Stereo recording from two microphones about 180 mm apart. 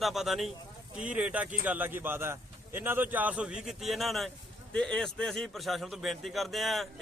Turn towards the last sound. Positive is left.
turn(degrees=0)  # may be behind; listen again after turning